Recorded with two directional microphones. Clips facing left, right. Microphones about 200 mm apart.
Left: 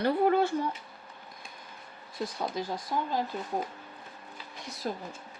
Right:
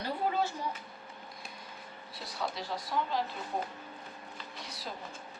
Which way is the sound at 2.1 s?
50° left (ahead or behind).